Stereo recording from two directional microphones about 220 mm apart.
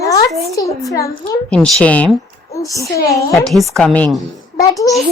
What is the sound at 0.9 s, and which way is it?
A child's voice, 15° left (ahead or behind).